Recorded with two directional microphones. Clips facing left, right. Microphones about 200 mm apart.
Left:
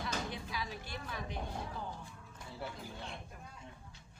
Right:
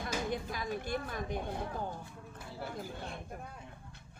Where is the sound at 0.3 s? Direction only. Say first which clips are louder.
Right 6 dB; 50° right (ahead or behind).